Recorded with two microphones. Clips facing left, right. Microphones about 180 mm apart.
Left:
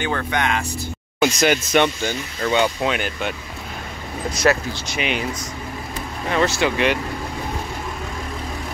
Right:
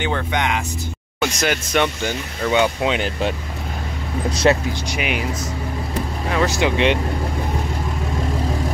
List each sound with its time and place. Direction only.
0.0 s speech: 20° right (ahead or behind)
1.4 s speech: centre (ahead or behind)
2.0 s speech: 15° right (ahead or behind)
3.0 s speech: 30° right (ahead or behind)
4.4 s speech: 20° right (ahead or behind)
4.8 s speech: 10° right (ahead or behind)
6.3 s speech: 15° right (ahead or behind)